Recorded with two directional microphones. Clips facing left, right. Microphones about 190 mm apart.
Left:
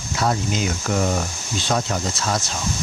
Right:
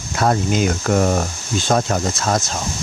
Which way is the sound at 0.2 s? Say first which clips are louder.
Right 5 dB; 55° right (ahead or behind).